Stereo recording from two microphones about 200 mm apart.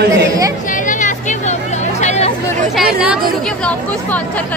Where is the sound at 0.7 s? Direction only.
40° left (ahead or behind).